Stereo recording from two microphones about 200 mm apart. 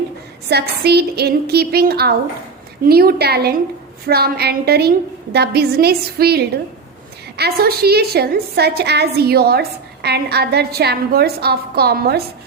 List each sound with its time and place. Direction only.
0.5 s a woman's voice: 55° right (ahead or behind)